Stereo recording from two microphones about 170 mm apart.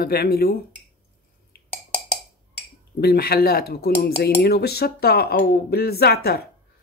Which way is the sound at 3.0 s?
65° left (ahead or behind).